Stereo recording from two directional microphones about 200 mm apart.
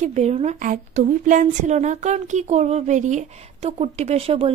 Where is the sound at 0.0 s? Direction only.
35° right (ahead or behind).